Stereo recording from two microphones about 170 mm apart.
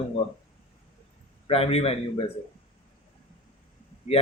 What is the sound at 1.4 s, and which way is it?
Speech, 35° left (ahead or behind).